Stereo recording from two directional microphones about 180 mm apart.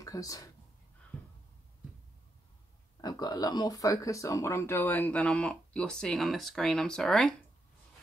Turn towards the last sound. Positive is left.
turn(degrees=0)  # may be behind; listen again after turning